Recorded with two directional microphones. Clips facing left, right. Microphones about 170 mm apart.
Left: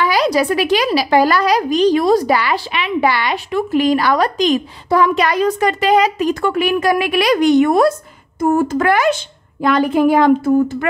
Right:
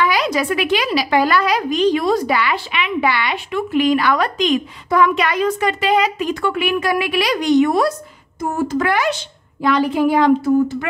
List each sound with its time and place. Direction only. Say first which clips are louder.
0.0 s a woman's voice: left 3 dB; 35° left (ahead or behind); by 10.9 s 50° left (ahead or behind)